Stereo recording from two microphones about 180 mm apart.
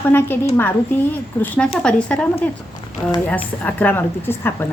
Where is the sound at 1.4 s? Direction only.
5° left (ahead or behind).